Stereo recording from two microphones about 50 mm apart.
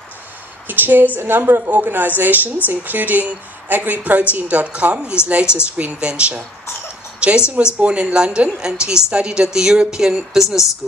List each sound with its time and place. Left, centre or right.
0.7 s a woman's voice: right
1.7 s a woman's voice: right
7.2 s a sound: right
7.5 s speech: right; by 10.7 s centre